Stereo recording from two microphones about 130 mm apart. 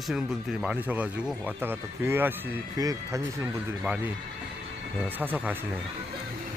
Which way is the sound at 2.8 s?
25° right (ahead or behind).